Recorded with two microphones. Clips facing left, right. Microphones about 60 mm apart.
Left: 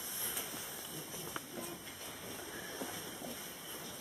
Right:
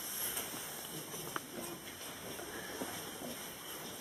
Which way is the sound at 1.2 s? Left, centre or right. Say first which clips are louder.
Right 2 dB; centre.